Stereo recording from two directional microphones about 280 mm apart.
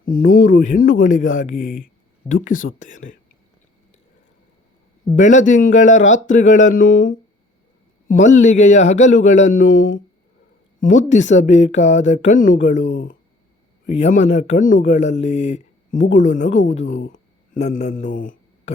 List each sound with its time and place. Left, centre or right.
0.0 s speech: left
0.3 s speech: left
0.8 s speech: left
5.1 s speech: left
8.0 s speech: left
12.8 s speech: left
13.9 s speech: left
17.0 s a sound: left
18.0 s mantra: left